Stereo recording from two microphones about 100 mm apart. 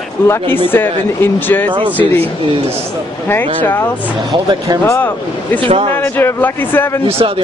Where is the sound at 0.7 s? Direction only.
20° left (ahead or behind).